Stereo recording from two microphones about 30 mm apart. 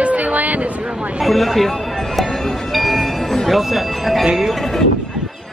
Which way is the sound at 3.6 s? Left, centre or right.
Centre.